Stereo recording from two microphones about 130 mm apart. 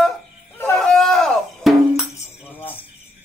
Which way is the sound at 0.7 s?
5° left (ahead or behind).